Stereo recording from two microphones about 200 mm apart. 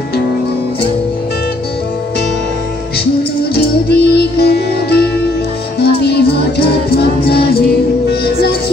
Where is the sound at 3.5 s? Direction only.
55° left (ahead or behind).